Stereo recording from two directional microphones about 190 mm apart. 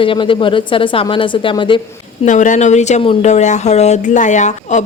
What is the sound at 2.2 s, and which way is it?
A woman's voice, 40° left (ahead or behind).